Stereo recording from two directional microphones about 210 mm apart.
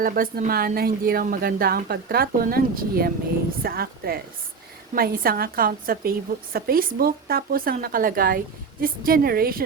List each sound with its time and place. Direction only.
0.0 s a woman's voice: 45° right (ahead or behind)